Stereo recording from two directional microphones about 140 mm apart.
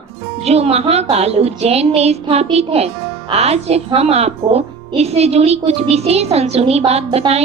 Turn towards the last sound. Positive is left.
turn(degrees=-50)  # may be behind; listen again after turning